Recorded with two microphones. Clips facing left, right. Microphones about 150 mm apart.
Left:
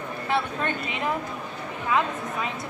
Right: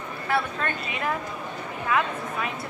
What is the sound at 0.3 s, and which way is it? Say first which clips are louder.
Speech: even; 20° left (ahead or behind).